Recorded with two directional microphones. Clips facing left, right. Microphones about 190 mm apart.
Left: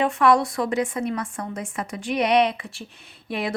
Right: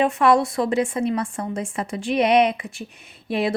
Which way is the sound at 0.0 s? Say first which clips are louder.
Right 1 dB; 25° right (ahead or behind).